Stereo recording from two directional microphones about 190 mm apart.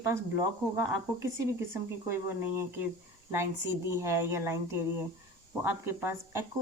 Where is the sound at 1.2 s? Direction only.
15° right (ahead or behind).